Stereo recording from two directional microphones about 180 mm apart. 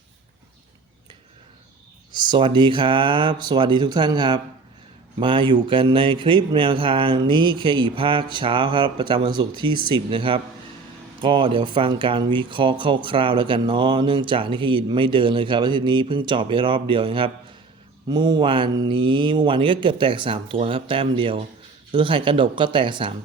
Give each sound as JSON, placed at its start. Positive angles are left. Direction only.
{"t": 2.1, "sound": "speech", "side_deg": -25}